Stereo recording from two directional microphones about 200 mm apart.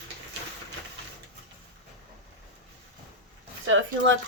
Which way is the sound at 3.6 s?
80° right.